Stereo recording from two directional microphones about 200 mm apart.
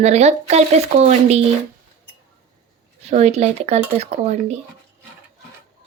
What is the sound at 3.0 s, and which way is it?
Speech, 30° right (ahead or behind).